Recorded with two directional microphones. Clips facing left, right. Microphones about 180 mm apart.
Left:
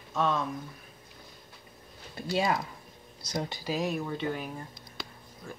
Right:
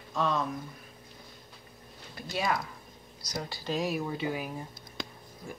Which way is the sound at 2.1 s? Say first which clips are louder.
Left 3 dB; 25° left (ahead or behind).